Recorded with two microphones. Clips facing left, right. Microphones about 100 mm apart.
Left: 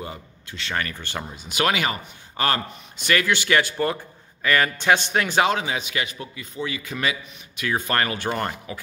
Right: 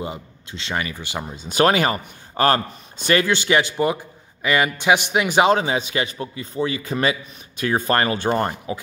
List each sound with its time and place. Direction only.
0.0 s a man's voice: 20° right (ahead or behind)
0.8 s speech: 10° right (ahead or behind)
1.3 s a man's voice: 35° right (ahead or behind); by 5.5 s 15° right (ahead or behind)
5.5 s a man's voice: 35° right (ahead or behind)